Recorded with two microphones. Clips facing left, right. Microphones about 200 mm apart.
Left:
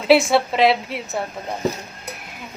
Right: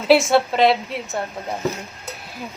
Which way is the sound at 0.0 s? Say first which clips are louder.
Even; centre (ahead or behind).